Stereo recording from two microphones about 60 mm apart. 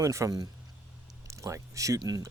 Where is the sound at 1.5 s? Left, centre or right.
Right.